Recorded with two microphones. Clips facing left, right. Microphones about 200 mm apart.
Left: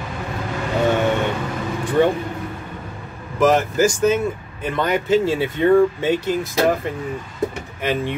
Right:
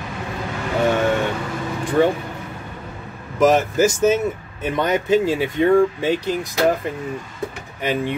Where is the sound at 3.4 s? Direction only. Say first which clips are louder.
Right 1 dB; 20° right (ahead or behind).